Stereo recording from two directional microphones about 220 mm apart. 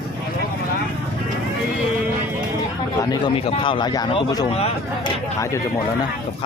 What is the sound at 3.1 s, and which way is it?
Speech, 25° left (ahead or behind).